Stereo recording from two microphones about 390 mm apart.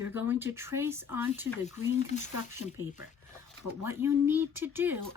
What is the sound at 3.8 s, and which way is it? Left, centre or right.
A woman's voice, centre.